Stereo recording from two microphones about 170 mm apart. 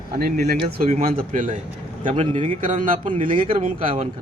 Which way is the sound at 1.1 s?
50° right (ahead or behind).